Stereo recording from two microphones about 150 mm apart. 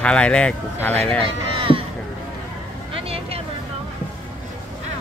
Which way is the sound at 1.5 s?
35° right (ahead or behind).